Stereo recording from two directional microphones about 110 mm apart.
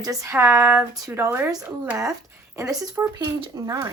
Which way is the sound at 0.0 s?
30° right (ahead or behind).